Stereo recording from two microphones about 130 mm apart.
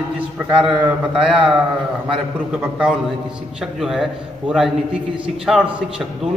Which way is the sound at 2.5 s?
5° right (ahead or behind).